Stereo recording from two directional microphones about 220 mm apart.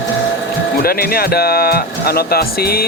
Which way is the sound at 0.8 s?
45° left (ahead or behind).